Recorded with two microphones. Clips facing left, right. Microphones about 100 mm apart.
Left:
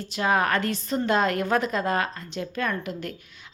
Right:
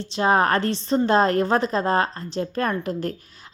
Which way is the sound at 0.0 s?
30° right (ahead or behind).